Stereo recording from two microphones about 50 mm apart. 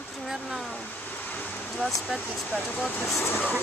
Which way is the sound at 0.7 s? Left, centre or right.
Left.